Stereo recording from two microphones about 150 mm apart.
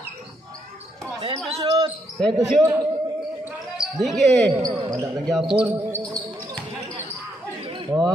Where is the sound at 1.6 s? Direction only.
30° right (ahead or behind).